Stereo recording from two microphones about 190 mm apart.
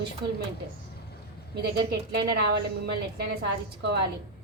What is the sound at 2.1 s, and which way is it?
Speech, 60° right (ahead or behind).